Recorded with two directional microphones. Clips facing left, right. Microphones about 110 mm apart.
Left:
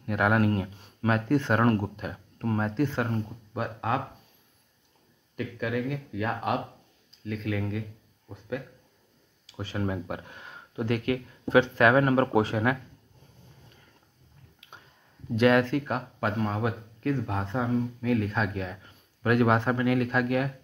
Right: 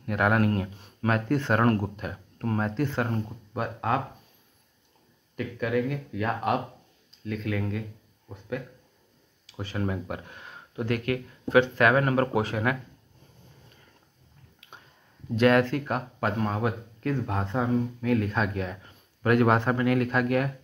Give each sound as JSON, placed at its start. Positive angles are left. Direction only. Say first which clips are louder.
{"t": 0.0, "sound": "speech", "louder": "even", "side_deg": 10}
{"t": 5.3, "sound": "speech", "louder": "right 3 dB", "side_deg": 5}
{"t": 9.6, "sound": "speech", "louder": "right 1 dB", "side_deg": 30}
{"t": 9.8, "sound": "speech", "louder": "even", "side_deg": 20}
{"t": 15.3, "sound": "speech", "louder": "right 1 dB", "side_deg": 10}